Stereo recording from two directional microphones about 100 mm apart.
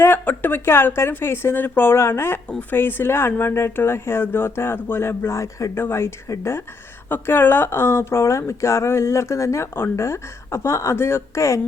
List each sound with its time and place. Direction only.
0.0 s speech: 20° left (ahead or behind)